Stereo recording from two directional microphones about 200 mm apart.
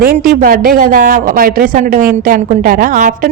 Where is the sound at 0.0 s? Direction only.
45° right (ahead or behind).